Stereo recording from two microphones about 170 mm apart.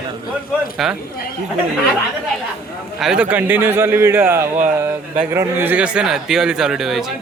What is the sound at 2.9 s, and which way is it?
Speech, 5° right (ahead or behind).